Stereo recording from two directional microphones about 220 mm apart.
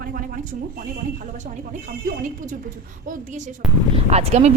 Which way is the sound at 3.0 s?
35° right (ahead or behind).